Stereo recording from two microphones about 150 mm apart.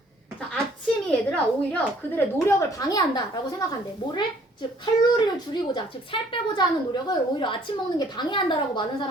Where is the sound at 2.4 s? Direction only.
25° left (ahead or behind).